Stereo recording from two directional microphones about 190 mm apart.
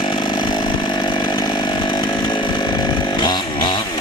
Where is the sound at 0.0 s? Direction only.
25° left (ahead or behind).